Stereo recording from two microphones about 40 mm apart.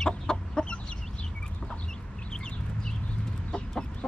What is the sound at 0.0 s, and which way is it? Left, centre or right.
Chicken, centre.